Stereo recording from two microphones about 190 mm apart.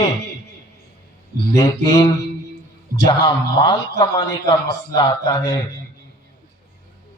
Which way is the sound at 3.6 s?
20° left (ahead or behind).